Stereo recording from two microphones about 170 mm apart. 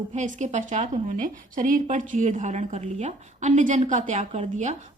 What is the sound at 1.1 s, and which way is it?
Speech, 50° right (ahead or behind).